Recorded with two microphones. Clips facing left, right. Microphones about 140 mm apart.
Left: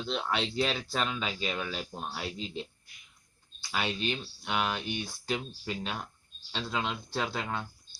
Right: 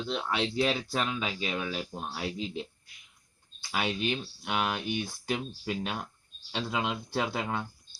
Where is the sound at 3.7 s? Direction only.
10° right (ahead or behind).